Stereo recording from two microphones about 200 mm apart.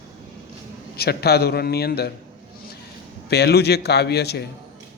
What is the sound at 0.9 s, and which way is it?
Speech, 50° left (ahead or behind).